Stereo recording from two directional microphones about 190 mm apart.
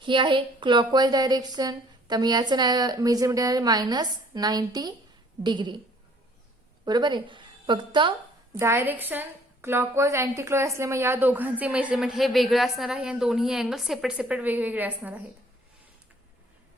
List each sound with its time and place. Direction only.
0.0 s a woman's voice: 25° right (ahead or behind)
6.8 s a woman's voice: 20° right (ahead or behind)
8.5 s a woman's voice: 15° right (ahead or behind)